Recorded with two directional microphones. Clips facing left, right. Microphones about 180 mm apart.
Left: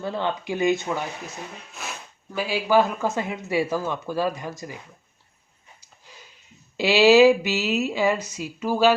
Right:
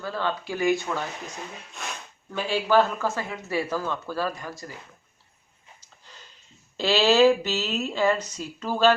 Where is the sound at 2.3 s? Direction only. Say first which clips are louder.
Left 1 dB; 10° left (ahead or behind).